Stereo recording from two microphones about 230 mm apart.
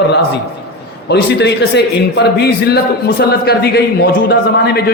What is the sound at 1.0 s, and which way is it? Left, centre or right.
A man's voice, left.